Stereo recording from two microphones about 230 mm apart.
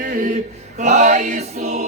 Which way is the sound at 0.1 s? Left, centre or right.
Right.